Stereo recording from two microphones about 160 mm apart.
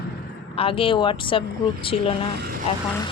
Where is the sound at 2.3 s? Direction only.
75° right (ahead or behind).